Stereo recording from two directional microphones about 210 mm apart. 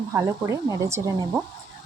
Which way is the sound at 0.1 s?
15° right (ahead or behind).